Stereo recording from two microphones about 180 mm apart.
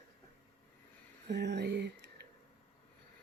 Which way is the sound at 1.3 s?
70° right (ahead or behind).